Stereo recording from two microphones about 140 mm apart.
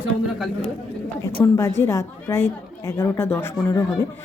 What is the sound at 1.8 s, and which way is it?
A woman's voice, 20° left (ahead or behind).